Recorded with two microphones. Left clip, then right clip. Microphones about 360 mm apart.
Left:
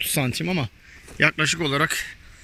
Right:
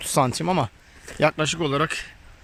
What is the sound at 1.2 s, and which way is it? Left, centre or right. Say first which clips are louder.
Speech: left 1 dB; centre.